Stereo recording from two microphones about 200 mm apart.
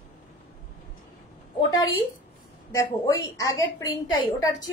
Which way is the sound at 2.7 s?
15° left (ahead or behind).